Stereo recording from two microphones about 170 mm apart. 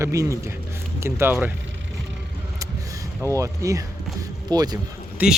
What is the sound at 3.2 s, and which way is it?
Speech, 15° right (ahead or behind).